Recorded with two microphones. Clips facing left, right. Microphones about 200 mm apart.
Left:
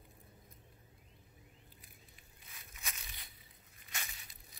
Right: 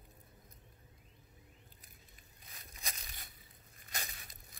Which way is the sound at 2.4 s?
35° right (ahead or behind).